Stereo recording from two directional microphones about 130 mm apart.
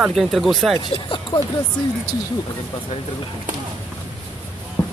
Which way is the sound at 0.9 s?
40° left (ahead or behind).